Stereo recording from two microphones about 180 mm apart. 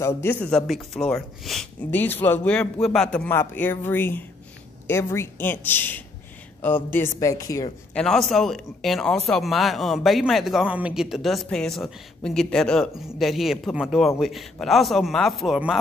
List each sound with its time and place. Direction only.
0.0 s speech: 10° left (ahead or behind)
7.9 s speech: 5° left (ahead or behind)